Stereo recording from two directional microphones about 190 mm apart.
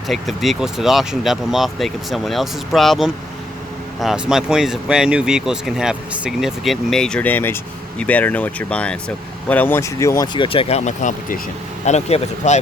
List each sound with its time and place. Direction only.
0.1 s speech: centre (ahead or behind); by 12.5 s 35° left (ahead or behind)